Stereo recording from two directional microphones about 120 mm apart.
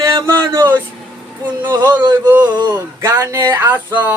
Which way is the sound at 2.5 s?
30° right (ahead or behind).